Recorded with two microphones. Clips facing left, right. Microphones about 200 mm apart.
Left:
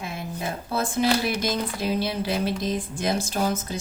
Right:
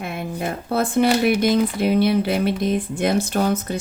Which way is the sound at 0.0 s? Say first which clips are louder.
Right 5 dB; 60° right (ahead or behind).